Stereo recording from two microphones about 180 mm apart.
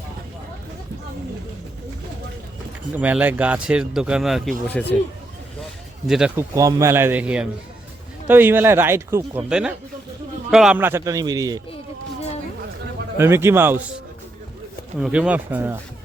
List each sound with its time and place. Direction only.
3.0 s speech: 10° right (ahead or behind); by 4.9 s 10° left (ahead or behind)
6.1 s speech: 5° right (ahead or behind)
6.5 s speech: 15° right (ahead or behind)
9.5 s speech: 5° right (ahead or behind); by 11.6 s 20° right (ahead or behind)
13.1 s speech: 15° right (ahead or behind)
14.9 s speech: 5° right (ahead or behind)